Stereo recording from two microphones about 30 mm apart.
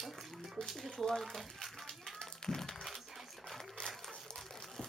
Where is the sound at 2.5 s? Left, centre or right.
Left.